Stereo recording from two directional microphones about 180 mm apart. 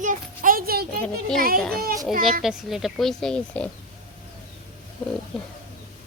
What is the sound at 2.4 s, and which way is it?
Speech, centre (ahead or behind).